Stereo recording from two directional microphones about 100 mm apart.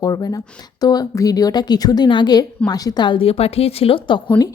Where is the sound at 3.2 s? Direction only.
85° left; by 4.5 s 45° left (ahead or behind).